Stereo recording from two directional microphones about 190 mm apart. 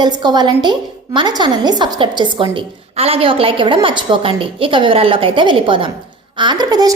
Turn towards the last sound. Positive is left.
turn(degrees=-20)  # may be behind; listen again after turning